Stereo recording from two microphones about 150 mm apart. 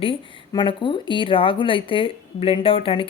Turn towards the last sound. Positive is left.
turn(degrees=35)  # may be behind; listen again after turning